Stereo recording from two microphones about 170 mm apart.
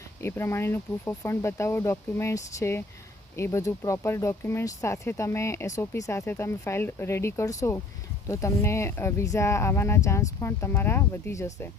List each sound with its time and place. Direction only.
0.2 s speech: 15° left (ahead or behind)